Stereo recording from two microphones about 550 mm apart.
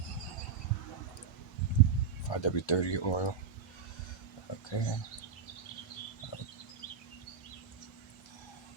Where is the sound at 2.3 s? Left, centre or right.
Left.